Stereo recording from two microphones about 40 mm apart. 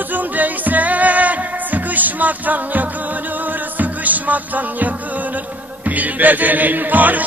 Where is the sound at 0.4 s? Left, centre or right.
Right.